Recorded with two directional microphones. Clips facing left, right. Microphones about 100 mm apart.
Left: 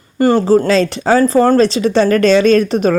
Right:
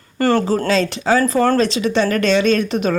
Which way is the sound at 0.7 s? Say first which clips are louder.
Left 4 dB; 35° left (ahead or behind).